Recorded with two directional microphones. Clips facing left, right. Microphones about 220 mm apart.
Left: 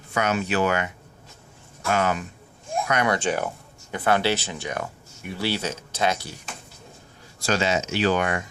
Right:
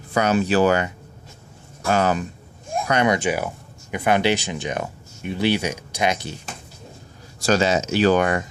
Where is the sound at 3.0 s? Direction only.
15° right (ahead or behind).